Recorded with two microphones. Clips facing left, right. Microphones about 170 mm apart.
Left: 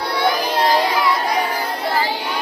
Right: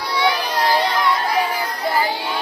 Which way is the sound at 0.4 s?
25° left (ahead or behind).